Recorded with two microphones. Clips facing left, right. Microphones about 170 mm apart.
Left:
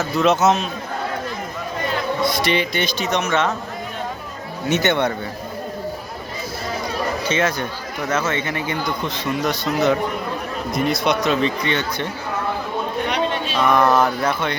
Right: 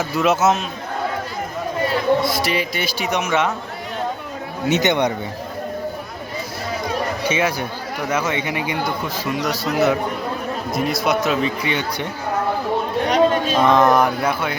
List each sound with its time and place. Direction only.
0.0 s speech: 10° right (ahead or behind)
2.2 s speech: centre (ahead or behind)
4.7 s speech: 15° right (ahead or behind)
7.3 s speech: 10° right (ahead or behind)
13.1 s a sound: 45° right (ahead or behind)
13.7 s speech: 20° right (ahead or behind)